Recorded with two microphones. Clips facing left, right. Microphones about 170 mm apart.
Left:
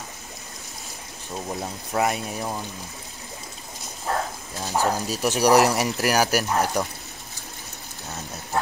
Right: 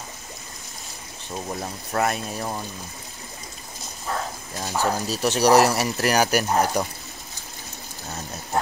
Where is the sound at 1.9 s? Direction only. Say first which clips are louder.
Even; 15° left (ahead or behind).